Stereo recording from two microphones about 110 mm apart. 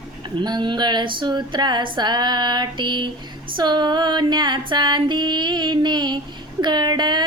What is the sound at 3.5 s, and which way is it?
Female singing, 40° right (ahead or behind).